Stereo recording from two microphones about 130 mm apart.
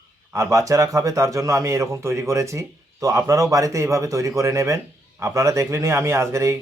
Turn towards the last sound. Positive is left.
turn(degrees=-20)  # may be behind; listen again after turning